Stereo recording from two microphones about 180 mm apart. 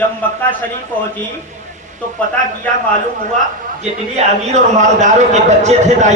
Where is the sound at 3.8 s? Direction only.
40° right (ahead or behind).